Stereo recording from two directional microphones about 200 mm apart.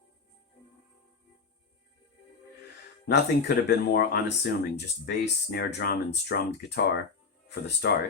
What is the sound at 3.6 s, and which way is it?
Speech, 55° left (ahead or behind).